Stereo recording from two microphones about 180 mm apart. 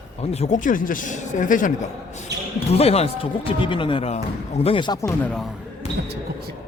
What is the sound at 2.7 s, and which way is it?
Speech, 35° left (ahead or behind).